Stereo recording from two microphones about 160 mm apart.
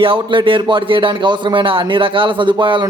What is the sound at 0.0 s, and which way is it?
A man's voice, 30° right (ahead or behind).